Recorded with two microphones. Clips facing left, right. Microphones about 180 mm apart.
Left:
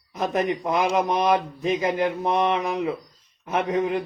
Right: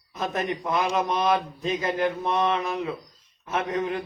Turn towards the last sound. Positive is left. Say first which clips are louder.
# left 4 dB
turn(degrees=15)  # may be behind; listen again after turning